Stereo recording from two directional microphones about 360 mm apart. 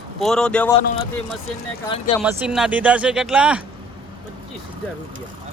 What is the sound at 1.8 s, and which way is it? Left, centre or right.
Speech, centre.